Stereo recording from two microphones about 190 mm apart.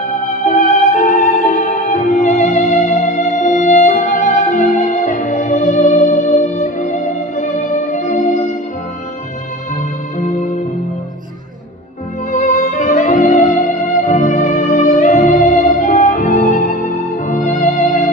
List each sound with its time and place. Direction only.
0.4 s music: 45° left (ahead or behind)
10.2 s music: 40° left (ahead or behind)
12.3 s music: 45° left (ahead or behind)